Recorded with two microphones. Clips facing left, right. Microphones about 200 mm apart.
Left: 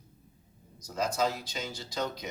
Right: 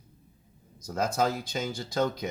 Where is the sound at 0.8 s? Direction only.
55° right (ahead or behind).